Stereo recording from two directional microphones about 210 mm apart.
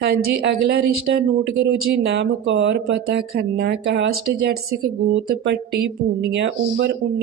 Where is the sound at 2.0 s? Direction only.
55° right (ahead or behind).